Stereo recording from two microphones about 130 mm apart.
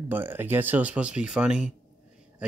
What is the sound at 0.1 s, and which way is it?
Speech, 15° right (ahead or behind).